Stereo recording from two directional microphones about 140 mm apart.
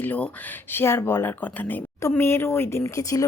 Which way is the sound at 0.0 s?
10° left (ahead or behind).